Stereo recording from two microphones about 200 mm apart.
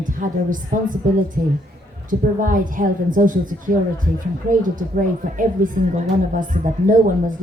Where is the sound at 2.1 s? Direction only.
40° right (ahead or behind).